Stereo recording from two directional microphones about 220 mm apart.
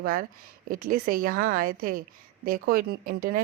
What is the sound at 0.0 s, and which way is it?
Speech, 40° right (ahead or behind).